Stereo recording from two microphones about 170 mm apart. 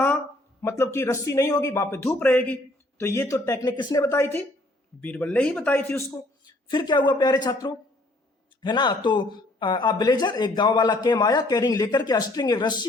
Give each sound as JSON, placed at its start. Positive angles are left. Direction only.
{"t": 0.6, "sound": "a man's voice", "side_deg": 15}
{"t": 6.4, "sound": "speech", "side_deg": 25}